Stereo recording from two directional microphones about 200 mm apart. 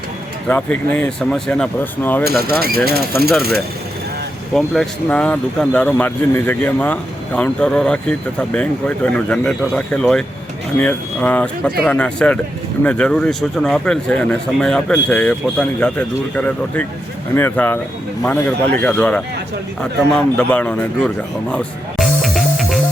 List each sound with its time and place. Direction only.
0.4 s speech: 5° left (ahead or behind)
2.4 s speech: 50° right (ahead or behind)
4.5 s speech: centre (ahead or behind)
21.5 s music: 5° left (ahead or behind)